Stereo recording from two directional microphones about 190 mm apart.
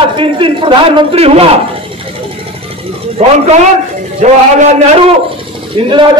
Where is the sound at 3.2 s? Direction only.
35° right (ahead or behind).